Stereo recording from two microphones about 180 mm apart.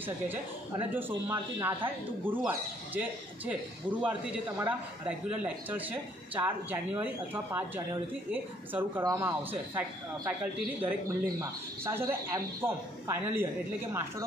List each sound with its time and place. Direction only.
0.0 s a man's voice: 10° right (ahead or behind)